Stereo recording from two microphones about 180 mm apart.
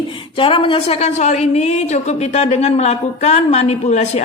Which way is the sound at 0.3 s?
30° left (ahead or behind).